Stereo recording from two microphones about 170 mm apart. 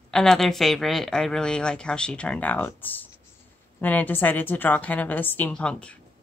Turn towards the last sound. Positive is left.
turn(degrees=5)  # may be behind; listen again after turning